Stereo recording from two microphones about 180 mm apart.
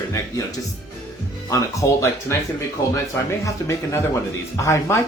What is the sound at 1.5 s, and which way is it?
Speech, 15° left (ahead or behind).